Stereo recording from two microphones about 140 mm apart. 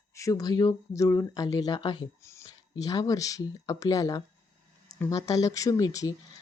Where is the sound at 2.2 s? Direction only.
20° left (ahead or behind).